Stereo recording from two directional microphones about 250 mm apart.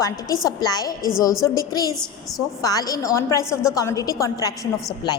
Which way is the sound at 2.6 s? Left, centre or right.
Centre.